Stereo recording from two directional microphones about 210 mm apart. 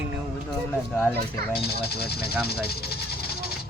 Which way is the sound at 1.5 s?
50° left (ahead or behind).